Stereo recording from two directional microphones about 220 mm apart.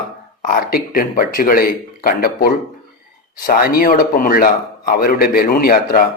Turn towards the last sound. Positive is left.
turn(degrees=40)  # may be behind; listen again after turning